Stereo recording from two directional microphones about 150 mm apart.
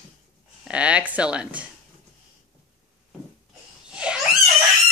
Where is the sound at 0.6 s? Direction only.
5° right (ahead or behind).